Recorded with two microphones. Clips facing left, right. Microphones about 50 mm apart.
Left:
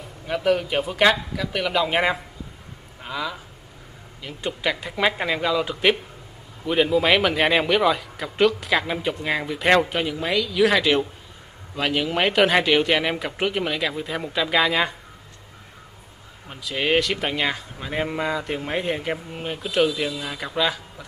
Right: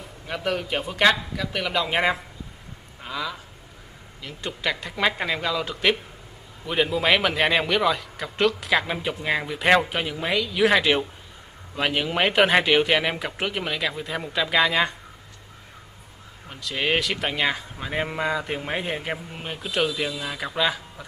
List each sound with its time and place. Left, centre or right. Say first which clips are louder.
0.3 s a man's voice: left 5 dB; centre
16.4 s a man's voice: left 2 dB; centre